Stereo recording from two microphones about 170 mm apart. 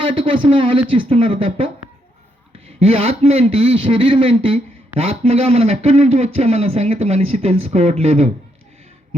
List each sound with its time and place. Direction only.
0.0 s a man's voice: 30° right (ahead or behind)
2.8 s a man's voice: 35° right (ahead or behind)